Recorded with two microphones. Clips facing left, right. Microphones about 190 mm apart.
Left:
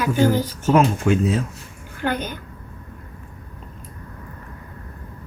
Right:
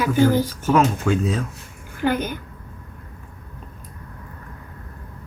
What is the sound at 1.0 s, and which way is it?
Speech, 20° left (ahead or behind).